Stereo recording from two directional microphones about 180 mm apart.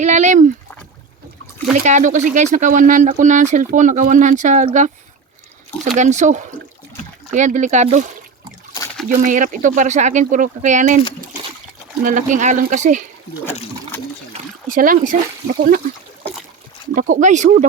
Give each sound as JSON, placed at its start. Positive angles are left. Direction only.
{"t": 0.0, "sound": "speech", "side_deg": -40}
{"t": 1.7, "sound": "speech", "side_deg": -45}
{"t": 6.0, "sound": "speech", "side_deg": -40}
{"t": 9.0, "sound": "speech", "side_deg": -45}
{"t": 12.0, "sound": "speech", "side_deg": -45}
{"t": 14.7, "sound": "speech", "side_deg": -50}
{"t": 16.9, "sound": "speech", "side_deg": -45}